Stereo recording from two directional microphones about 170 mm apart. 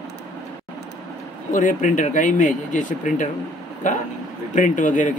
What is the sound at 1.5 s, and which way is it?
Speech, 50° left (ahead or behind).